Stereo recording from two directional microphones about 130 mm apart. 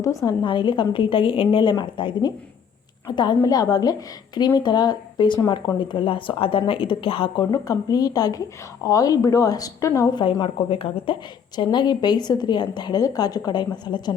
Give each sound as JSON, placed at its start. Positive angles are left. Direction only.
{"t": 0.0, "sound": "a woman's voice", "side_deg": 25}
{"t": 0.4, "sound": "a woman's voice", "side_deg": 40}
{"t": 7.5, "sound": "a woman's voice", "side_deg": 30}
{"t": 10.1, "sound": "a woman's voice", "side_deg": 35}